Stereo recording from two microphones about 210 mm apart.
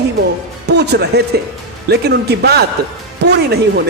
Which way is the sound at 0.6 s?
55° right (ahead or behind).